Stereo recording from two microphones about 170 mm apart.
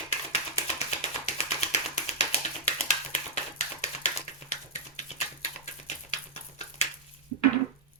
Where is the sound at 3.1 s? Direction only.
40° left (ahead or behind).